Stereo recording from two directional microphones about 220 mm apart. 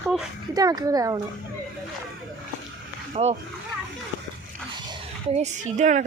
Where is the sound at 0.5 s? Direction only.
15° right (ahead or behind).